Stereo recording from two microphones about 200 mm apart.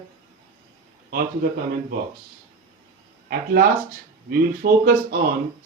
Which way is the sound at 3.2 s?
50° right (ahead or behind).